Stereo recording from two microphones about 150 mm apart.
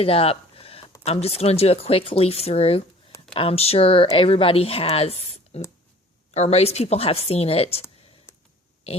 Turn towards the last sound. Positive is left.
turn(degrees=40)  # may be behind; listen again after turning